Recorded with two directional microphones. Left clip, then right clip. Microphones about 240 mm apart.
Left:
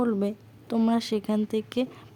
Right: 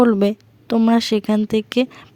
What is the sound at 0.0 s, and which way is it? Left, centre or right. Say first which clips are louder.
Speech: right 12 dB; right.